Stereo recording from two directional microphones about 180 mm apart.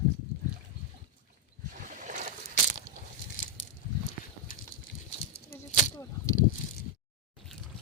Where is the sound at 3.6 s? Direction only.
90° left.